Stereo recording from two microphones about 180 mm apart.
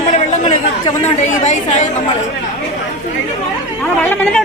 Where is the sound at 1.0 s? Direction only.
40° left (ahead or behind).